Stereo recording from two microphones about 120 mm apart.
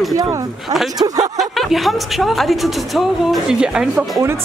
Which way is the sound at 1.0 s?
35° right (ahead or behind).